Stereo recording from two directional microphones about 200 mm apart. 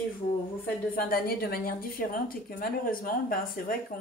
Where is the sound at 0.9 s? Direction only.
50° left (ahead or behind).